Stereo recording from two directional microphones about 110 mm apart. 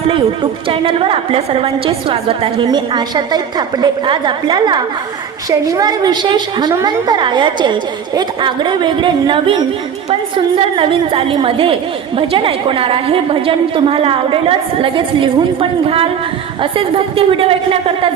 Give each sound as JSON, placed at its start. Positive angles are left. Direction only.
{"t": 0.7, "sound": "a woman's voice", "side_deg": -55}
{"t": 2.6, "sound": "a woman's voice", "side_deg": -45}